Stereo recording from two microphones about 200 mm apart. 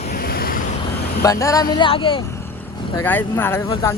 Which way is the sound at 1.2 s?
15° left (ahead or behind).